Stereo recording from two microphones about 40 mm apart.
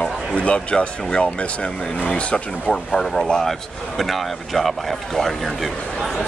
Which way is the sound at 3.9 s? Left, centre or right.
Centre.